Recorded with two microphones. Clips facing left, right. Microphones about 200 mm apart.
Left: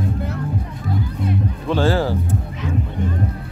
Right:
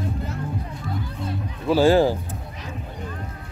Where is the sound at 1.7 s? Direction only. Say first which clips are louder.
Right 3 dB; 10° right (ahead or behind).